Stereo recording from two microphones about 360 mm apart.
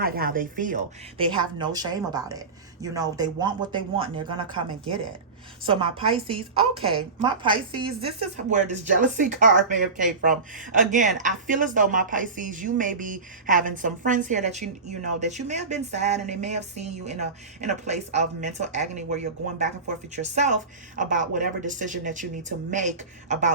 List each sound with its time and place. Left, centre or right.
0.0 s a woman's voice: right
5.6 s a woman's voice: centre